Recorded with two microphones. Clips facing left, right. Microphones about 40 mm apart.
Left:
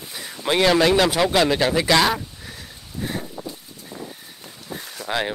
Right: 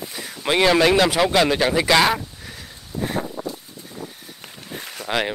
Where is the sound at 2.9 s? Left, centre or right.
Right.